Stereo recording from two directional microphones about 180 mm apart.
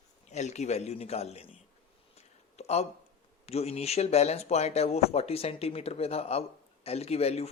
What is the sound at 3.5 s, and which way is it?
Speech, 35° left (ahead or behind).